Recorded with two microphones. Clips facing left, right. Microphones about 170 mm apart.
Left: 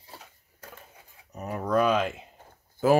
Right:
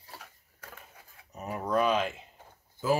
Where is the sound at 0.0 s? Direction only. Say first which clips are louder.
Left 1 dB; 25° left (ahead or behind).